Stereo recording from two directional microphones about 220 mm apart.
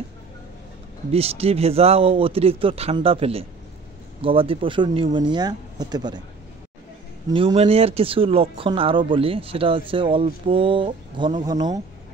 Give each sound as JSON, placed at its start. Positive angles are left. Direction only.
{"t": 1.1, "sound": "speech", "side_deg": -25}
{"t": 7.2, "sound": "speech", "side_deg": -20}